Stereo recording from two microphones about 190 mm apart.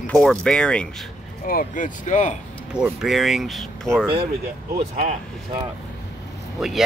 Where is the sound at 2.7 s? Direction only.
5° right (ahead or behind).